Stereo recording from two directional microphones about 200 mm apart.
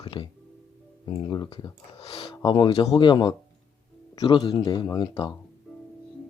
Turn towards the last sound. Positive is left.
turn(degrees=20)  # may be behind; listen again after turning